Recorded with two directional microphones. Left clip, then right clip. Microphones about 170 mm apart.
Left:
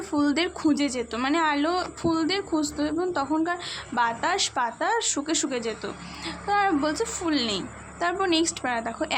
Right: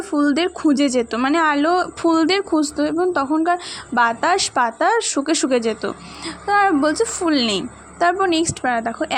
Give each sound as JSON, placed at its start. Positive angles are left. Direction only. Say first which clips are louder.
{"t": 0.1, "sound": "a woman's voice", "louder": "right 6 dB", "side_deg": -30}
{"t": 8.2, "sound": "a woman's voice", "louder": "right 6 dB", "side_deg": -30}